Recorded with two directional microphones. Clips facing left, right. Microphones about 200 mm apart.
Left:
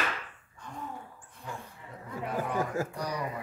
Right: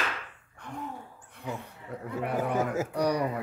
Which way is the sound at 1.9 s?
65° right (ahead or behind).